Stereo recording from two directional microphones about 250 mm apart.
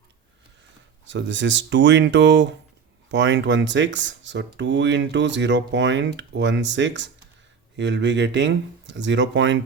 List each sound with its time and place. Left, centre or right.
1.0 s speech: right